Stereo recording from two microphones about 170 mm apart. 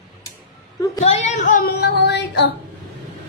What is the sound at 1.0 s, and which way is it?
Child singing, 40° left (ahead or behind).